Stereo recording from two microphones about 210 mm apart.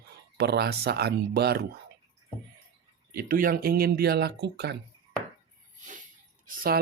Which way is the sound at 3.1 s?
45° right (ahead or behind).